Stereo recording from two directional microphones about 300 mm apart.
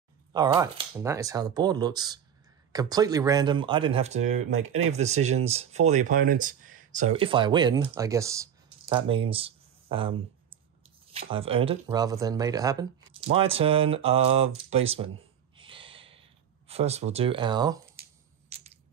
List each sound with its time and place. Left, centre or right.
0.3 s speech: centre
15.5 s gasp: centre